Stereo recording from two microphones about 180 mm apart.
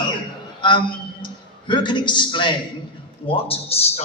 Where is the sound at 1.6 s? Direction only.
25° left (ahead or behind).